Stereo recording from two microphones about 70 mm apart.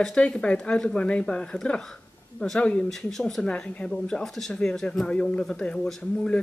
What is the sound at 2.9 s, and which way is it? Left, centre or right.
Speech, centre.